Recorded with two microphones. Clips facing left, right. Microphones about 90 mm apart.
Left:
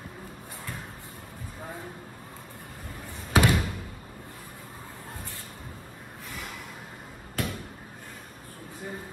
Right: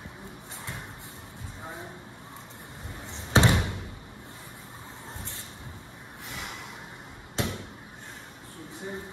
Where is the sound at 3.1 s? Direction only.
25° right (ahead or behind).